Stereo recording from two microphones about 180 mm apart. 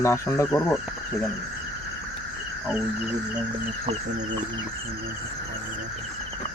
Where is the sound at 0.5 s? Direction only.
5° left (ahead or behind).